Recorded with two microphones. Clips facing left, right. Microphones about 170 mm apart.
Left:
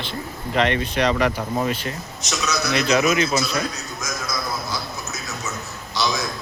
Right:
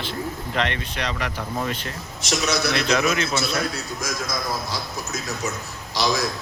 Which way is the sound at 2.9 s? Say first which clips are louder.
Left 6 dB; 10° left (ahead or behind).